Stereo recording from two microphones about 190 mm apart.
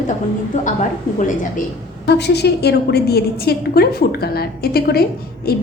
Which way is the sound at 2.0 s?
60° left (ahead or behind).